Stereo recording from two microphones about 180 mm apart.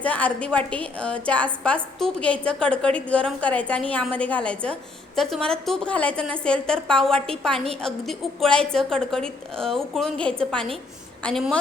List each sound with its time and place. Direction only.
0.0 s a woman's voice: 5° left (ahead or behind)